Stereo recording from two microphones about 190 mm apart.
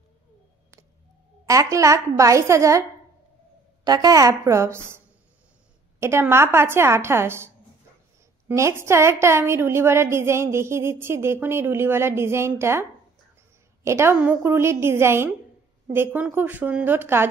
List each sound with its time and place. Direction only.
1.4 s a woman's voice: 15° right (ahead or behind)
3.8 s a woman's voice: 20° right (ahead or behind)
13.8 s a woman's voice: 15° right (ahead or behind)